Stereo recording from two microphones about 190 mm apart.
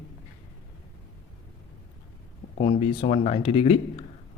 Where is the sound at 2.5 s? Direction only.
30° left (ahead or behind).